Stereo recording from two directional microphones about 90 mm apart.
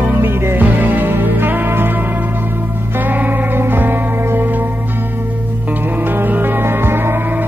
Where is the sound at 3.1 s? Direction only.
20° right (ahead or behind).